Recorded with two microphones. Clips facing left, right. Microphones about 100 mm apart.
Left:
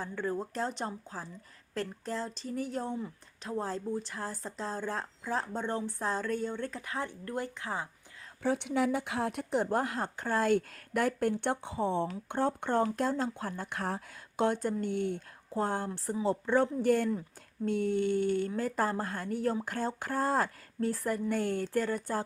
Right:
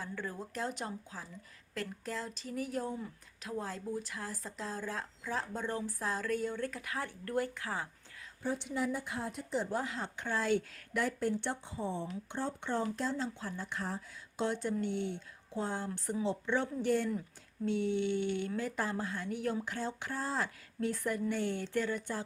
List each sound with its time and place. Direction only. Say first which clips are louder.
0.0 s speech: left 7 dB; 35° left (ahead or behind)
8.4 s speech: left 6 dB; 80° left
12.0 s speech: left 7 dB; 55° left (ahead or behind)